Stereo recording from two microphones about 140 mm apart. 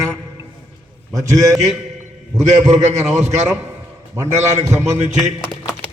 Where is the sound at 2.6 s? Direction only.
55° right (ahead or behind).